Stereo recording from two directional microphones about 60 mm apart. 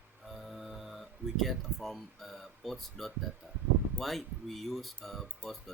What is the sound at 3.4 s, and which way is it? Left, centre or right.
Speech, right.